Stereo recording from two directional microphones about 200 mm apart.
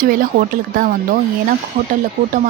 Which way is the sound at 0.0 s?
45° right (ahead or behind).